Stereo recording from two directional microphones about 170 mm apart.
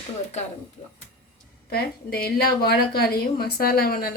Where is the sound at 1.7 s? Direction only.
65° left (ahead or behind).